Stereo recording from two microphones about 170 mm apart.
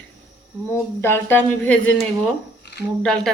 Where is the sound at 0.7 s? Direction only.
15° left (ahead or behind).